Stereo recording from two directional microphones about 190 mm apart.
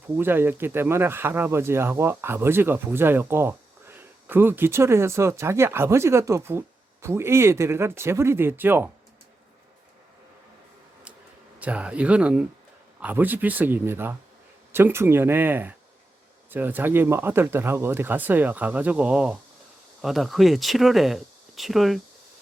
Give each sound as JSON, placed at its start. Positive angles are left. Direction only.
{"t": 0.2, "sound": "speech", "side_deg": -10}
{"t": 11.6, "sound": "speech", "side_deg": -5}